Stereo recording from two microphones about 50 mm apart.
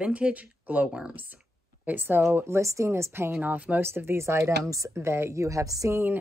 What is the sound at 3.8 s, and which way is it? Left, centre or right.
A woman's voice, right.